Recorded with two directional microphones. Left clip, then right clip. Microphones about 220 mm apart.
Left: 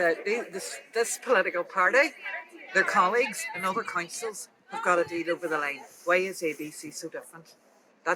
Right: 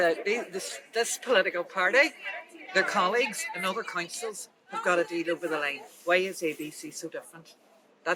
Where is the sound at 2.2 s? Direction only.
60° right (ahead or behind).